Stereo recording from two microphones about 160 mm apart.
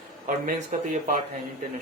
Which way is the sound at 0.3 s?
55° right (ahead or behind).